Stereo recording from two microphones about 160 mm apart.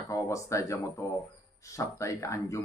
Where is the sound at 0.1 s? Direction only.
20° left (ahead or behind).